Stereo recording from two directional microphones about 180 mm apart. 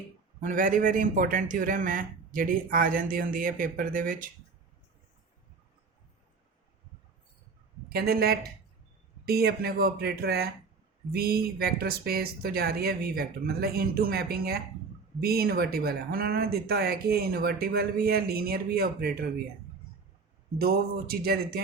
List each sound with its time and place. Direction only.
0.3 s a man's voice: 50° right (ahead or behind)
7.9 s speech: 60° right (ahead or behind)
20.6 s speech: 60° right (ahead or behind)